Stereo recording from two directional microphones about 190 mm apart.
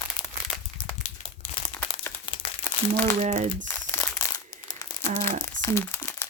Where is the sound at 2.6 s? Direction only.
10° left (ahead or behind).